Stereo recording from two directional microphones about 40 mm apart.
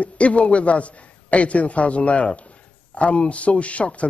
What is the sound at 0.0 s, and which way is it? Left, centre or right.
Speech, left.